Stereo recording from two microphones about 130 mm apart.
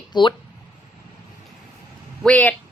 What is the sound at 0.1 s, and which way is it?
Speech, 35° left (ahead or behind).